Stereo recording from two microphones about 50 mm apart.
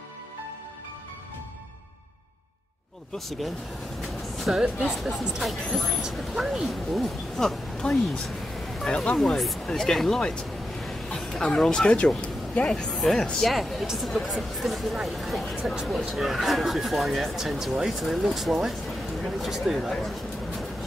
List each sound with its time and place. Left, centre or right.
3.3 s speech: centre
4.0 s a sound: centre
4.6 s speech: centre
4.9 s speech: centre
7.7 s a sound: centre
8.8 s speech: centre
9.2 s speech: centre
11.4 s speech: centre